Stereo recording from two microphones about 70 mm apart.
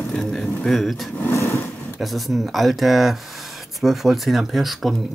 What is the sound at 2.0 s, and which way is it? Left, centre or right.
Speech, centre.